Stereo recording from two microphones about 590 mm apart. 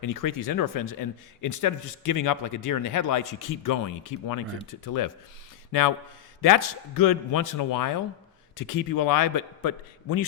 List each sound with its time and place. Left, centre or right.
0.0 s speech: left
6.6 s speech: left